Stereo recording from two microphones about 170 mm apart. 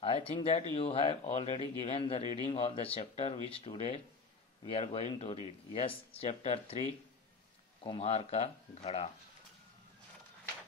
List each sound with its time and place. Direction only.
0.0 s speech: 35° left (ahead or behind)